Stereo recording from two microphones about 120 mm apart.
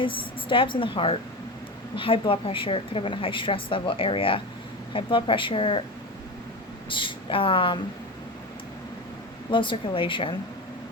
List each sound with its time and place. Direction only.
0.0 s a woman's voice: 45° left (ahead or behind)
6.9 s a woman's voice: 45° left (ahead or behind)
9.5 s a woman's voice: 45° left (ahead or behind)